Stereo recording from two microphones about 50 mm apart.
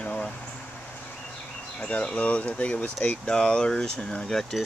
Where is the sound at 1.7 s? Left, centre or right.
Left.